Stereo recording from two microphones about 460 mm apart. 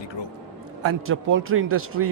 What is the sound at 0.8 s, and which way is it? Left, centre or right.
A man's voice, right.